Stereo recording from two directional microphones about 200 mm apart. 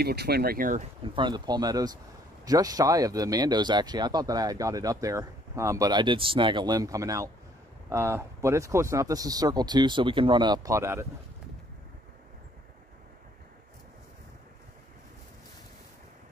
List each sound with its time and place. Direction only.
0.0 s speech: 55° right (ahead or behind)
1.1 s speech: 20° right (ahead or behind)